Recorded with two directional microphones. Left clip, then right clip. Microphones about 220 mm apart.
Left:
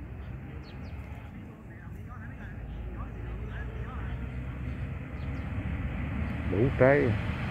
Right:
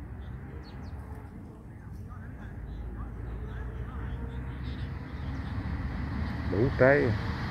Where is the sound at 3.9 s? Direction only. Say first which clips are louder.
Left 1 dB; 40° left (ahead or behind).